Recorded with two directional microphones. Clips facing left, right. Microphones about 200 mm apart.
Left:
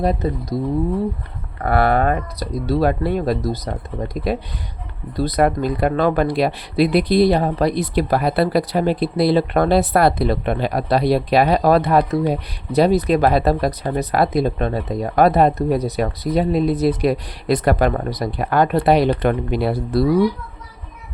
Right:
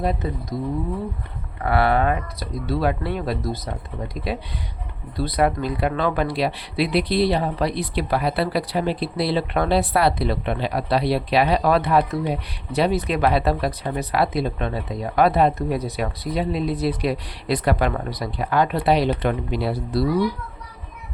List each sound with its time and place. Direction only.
0.0 s speech: 40° left (ahead or behind)
1.6 s speech: 45° left (ahead or behind)